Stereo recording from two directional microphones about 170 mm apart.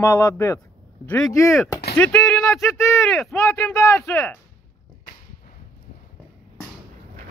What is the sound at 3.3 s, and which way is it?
Speech, 15° left (ahead or behind).